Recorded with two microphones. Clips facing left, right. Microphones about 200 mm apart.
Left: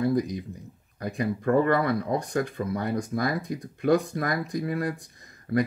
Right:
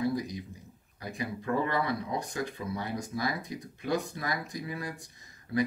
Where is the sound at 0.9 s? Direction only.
50° left (ahead or behind).